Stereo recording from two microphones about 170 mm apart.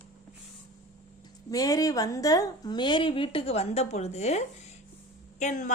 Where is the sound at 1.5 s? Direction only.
20° left (ahead or behind); by 5.7 s 45° left (ahead or behind).